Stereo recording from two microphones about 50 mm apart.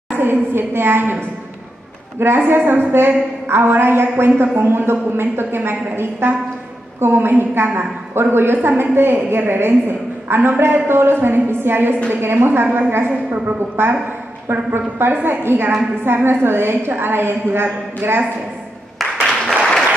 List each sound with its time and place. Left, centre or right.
0.2 s a woman's voice: right
2.3 s a woman's voice: right
19.4 s applause: centre